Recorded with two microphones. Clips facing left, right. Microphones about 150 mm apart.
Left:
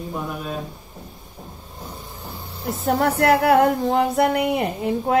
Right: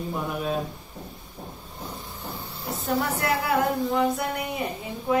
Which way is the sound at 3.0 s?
65° left (ahead or behind).